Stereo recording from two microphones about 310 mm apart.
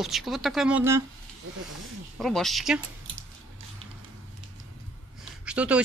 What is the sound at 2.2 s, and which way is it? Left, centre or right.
Speech, centre.